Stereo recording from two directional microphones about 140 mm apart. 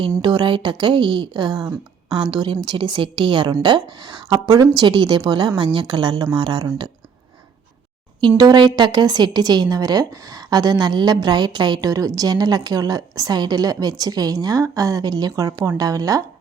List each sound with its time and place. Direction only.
0.2 s a woman's voice: 30° right (ahead or behind)
8.4 s a woman's voice: 30° right (ahead or behind)